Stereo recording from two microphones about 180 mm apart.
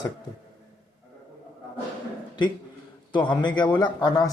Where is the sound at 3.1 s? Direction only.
25° left (ahead or behind).